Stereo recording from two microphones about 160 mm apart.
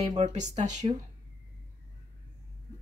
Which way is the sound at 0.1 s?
45° right (ahead or behind).